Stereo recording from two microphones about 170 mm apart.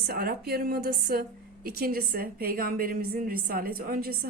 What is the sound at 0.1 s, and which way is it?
A woman's voice, 65° right (ahead or behind).